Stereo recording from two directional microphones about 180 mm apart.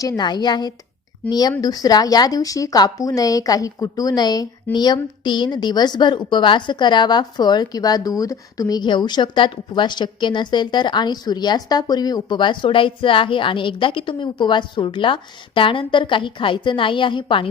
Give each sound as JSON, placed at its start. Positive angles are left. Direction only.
{"t": 0.0, "sound": "a woman's voice", "side_deg": 25}